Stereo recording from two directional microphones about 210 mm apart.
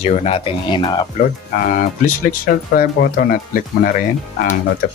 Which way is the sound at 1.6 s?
40° left (ahead or behind).